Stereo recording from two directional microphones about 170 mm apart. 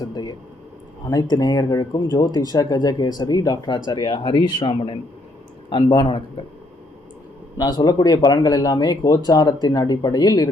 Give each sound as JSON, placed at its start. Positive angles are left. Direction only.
{"t": 0.0, "sound": "a sound", "side_deg": 25}
{"t": 1.0, "sound": "speech", "side_deg": 25}
{"t": 7.6, "sound": "speech", "side_deg": 20}